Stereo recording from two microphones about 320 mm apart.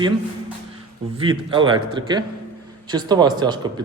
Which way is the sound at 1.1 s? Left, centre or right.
Centre.